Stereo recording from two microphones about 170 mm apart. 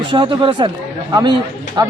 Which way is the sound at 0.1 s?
30° right (ahead or behind).